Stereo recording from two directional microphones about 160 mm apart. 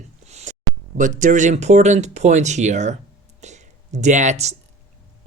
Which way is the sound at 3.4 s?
45° right (ahead or behind).